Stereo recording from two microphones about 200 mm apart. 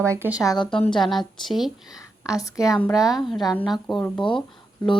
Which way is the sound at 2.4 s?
15° left (ahead or behind).